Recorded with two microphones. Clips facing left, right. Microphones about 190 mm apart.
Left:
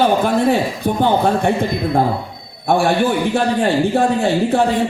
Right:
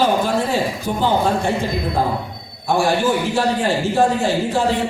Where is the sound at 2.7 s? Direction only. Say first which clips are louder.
Left 3 dB; 60° left (ahead or behind).